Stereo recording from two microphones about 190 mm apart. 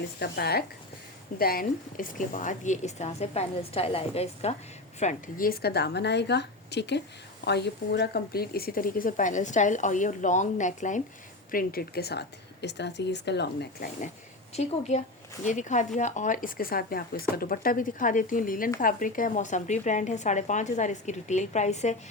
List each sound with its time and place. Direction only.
0.2 s a woman's voice: 55° left (ahead or behind); by 4.5 s 30° left (ahead or behind)
4.9 s a woman's voice: 45° left (ahead or behind)
11.5 s a woman's voice: 50° left (ahead or behind)
14.5 s speech: 35° left (ahead or behind)